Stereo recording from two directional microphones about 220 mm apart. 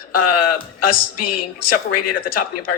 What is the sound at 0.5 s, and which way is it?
Speech, 40° left (ahead or behind).